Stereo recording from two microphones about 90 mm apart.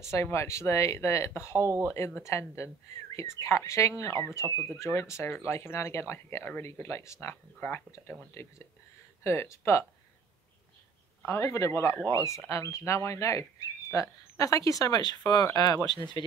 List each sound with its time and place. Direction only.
0.0 s speech: 30° left (ahead or behind)
1.6 s speech: 30° right (ahead or behind)
2.0 s speech: 30° left (ahead or behind)
8.4 s speech: 30° left (ahead or behind)
11.2 s speech: 35° left (ahead or behind); by 16.0 s 50° left (ahead or behind)